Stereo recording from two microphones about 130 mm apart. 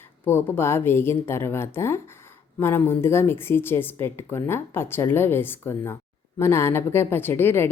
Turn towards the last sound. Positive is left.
turn(degrees=15)  # may be behind; listen again after turning